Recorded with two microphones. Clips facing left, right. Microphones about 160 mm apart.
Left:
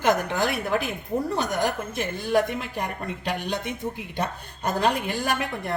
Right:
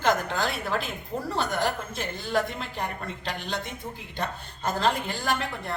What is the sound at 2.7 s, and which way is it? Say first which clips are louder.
A woman's voice: left 3 dB; 15° left (ahead or behind).